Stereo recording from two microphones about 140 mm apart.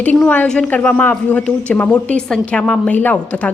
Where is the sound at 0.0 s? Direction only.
10° left (ahead or behind).